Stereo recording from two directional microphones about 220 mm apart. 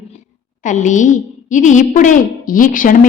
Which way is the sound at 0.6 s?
35° left (ahead or behind).